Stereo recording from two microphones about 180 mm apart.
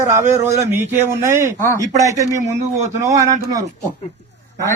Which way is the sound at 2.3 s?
40° right (ahead or behind).